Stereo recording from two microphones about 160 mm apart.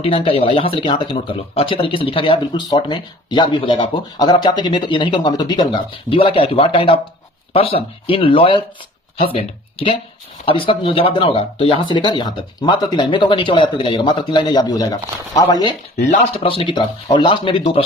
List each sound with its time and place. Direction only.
0.0 s speech: 35° left (ahead or behind)
16.0 s speech: 45° left (ahead or behind)